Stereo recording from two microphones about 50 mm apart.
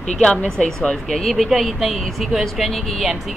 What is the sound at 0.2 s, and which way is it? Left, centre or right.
Speech, left.